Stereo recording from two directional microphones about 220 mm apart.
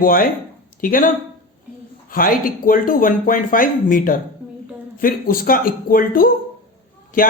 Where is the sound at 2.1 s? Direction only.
40° left (ahead or behind).